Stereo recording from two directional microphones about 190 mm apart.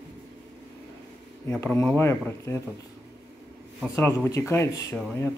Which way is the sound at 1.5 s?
10° left (ahead or behind).